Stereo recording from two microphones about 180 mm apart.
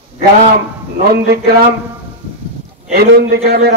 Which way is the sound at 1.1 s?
60° right (ahead or behind).